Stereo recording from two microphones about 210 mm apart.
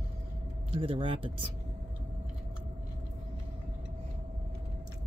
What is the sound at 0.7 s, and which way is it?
Speech, 25° right (ahead or behind).